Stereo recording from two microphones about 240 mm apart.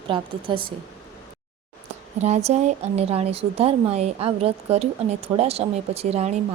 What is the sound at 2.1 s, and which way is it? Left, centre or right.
Speech, right.